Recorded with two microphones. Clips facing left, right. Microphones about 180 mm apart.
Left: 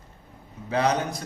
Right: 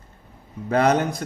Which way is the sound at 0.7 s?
55° right (ahead or behind).